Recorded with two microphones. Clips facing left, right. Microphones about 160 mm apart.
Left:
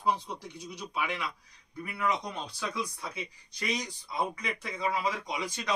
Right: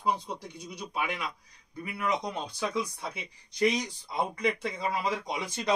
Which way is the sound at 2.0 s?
20° right (ahead or behind).